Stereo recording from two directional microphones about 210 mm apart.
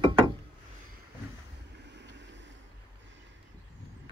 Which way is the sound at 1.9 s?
60° right (ahead or behind).